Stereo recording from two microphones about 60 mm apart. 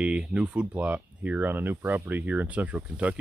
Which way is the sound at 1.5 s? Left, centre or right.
Right.